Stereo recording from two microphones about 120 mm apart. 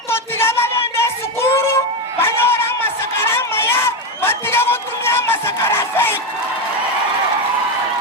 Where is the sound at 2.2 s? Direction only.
20° left (ahead or behind).